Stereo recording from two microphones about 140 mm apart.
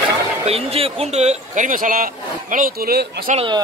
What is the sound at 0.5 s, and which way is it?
Speech, 50° right (ahead or behind).